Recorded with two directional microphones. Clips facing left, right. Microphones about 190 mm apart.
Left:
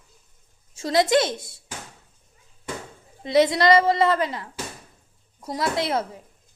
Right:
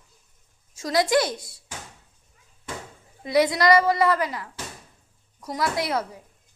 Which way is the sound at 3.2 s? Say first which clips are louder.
Left 2 dB; 25° left (ahead or behind).